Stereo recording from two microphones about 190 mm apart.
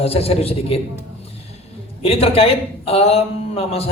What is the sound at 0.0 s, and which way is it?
Speech, 30° left (ahead or behind).